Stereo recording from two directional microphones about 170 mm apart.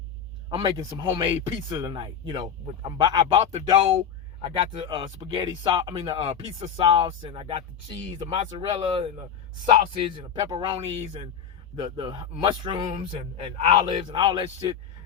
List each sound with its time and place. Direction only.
0.5 s speech: 25° right (ahead or behind)
13.0 s speech: 40° right (ahead or behind)